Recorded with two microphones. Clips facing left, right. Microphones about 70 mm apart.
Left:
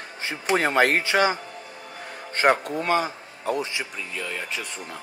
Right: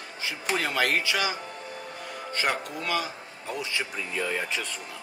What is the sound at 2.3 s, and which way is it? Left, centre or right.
Speech, left.